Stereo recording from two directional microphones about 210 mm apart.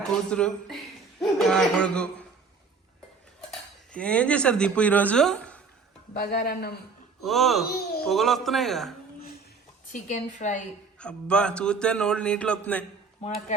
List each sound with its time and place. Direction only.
0.3 s a man's voice: 5° left (ahead or behind)
3.9 s a man's voice: 5° left (ahead or behind)
6.3 s a woman's voice: 45° left (ahead or behind)
7.2 s a man's voice: centre (ahead or behind)
7.6 s speech: 45° left (ahead or behind)
8.0 s a man's voice: centre (ahead or behind)
9.9 s a woman's voice: 35° left (ahead or behind)
11.0 s a man's voice: 5° left (ahead or behind)